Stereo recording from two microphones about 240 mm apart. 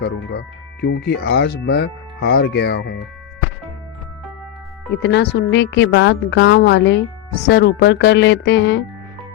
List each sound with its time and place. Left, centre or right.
0.0 s speech: left
5.0 s speech: left